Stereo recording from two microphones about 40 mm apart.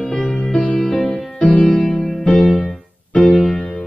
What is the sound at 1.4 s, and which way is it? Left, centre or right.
Music, left.